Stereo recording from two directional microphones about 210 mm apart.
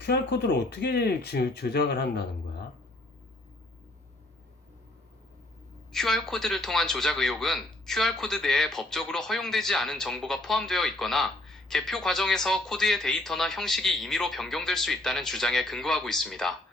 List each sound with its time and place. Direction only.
0.0 s speech: 55° left (ahead or behind)
5.9 s a man's voice: centre (ahead or behind)